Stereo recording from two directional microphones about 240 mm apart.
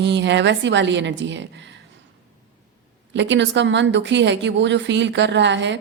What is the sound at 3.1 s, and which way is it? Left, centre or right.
A woman's voice, right.